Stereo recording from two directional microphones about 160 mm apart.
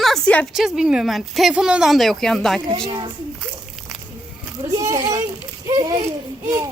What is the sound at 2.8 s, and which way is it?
Speech, 30° right (ahead or behind).